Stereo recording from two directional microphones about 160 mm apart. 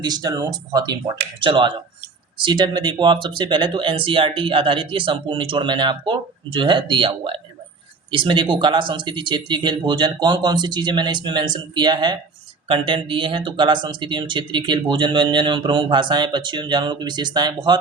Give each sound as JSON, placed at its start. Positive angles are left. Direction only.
{"t": 0.0, "sound": "speech", "side_deg": -25}